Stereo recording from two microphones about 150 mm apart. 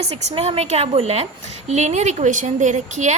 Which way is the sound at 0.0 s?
45° right (ahead or behind).